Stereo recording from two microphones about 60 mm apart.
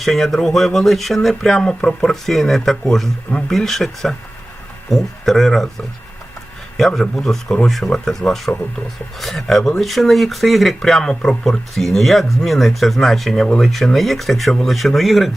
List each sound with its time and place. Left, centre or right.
0.0 s speech: centre
6.7 s speech: centre
9.2 s speech: centre